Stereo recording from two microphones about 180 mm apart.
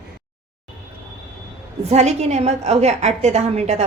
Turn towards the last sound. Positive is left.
turn(degrees=-35)  # may be behind; listen again after turning